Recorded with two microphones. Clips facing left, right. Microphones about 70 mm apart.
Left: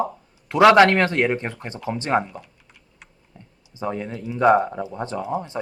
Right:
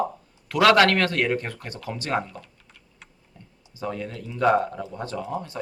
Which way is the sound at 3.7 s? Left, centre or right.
Left.